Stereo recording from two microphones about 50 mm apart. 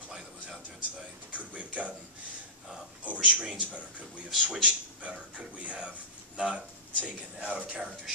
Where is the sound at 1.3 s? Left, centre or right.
Right.